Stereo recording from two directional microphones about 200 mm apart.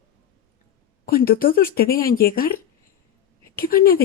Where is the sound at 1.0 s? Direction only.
50° left (ahead or behind).